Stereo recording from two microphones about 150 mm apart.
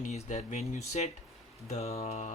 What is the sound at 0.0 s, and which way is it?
Speech, 50° left (ahead or behind).